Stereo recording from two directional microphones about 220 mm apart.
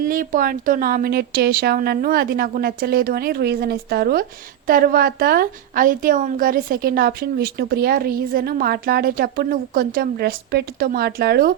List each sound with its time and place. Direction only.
0.0 s speech: 40° right (ahead or behind)